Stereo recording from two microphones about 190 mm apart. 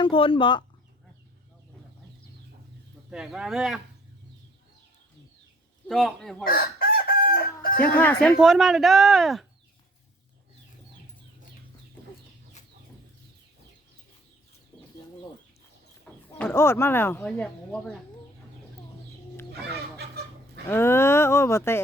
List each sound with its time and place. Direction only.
0.0 s speech: 25° left (ahead or behind)
3.1 s speech: 5° right (ahead or behind)
5.9 s speech: centre (ahead or behind)
6.4 s chicken: 50° left (ahead or behind)
7.9 s speech: 10° left (ahead or behind)
8.4 s speech: centre (ahead or behind)
14.7 s chicken: 10° left (ahead or behind)
16.1 s a sound: 5° left (ahead or behind)
16.4 s speech: 10° left (ahead or behind)
19.6 s chicken: 60° right (ahead or behind)
20.7 s speech: 10° left (ahead or behind)